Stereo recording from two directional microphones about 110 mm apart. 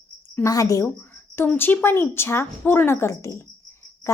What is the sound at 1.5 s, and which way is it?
A woman's voice, 15° left (ahead or behind).